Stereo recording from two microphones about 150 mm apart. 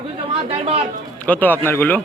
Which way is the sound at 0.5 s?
40° right (ahead or behind).